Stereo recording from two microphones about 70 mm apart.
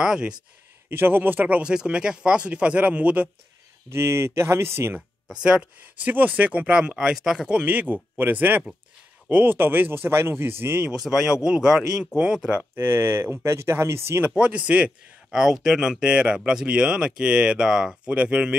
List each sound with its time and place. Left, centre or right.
0.0 s speech: centre
0.8 s speech: right
1.6 s speech: centre
3.9 s speech: right
5.3 s speech: centre; by 10.8 s right
11.0 s speech: centre
12.7 s speech: right
14.2 s speech: centre